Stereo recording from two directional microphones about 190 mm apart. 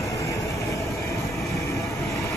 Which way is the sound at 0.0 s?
15° left (ahead or behind).